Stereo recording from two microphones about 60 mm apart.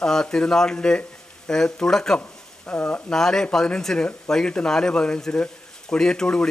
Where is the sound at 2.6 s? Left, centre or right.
Left.